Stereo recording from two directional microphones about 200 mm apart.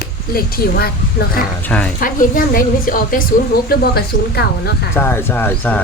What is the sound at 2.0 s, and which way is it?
A woman's voice, 45° left (ahead or behind).